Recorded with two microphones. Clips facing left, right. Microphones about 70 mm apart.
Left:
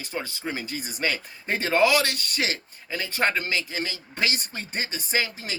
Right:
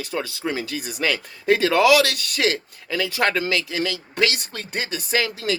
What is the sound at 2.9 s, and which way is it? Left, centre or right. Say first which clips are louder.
Speech: right 4 dB; right.